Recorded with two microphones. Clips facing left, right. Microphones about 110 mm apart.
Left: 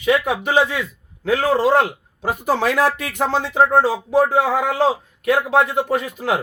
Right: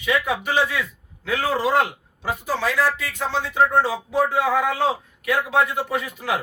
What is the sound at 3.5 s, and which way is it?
Speech, 35° left (ahead or behind).